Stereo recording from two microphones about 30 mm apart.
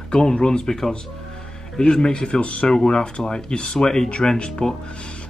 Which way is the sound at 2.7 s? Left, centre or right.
Left.